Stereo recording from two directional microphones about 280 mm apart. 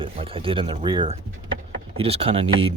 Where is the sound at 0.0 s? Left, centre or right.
Centre.